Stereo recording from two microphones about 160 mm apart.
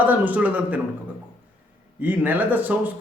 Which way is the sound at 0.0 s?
10° right (ahead or behind).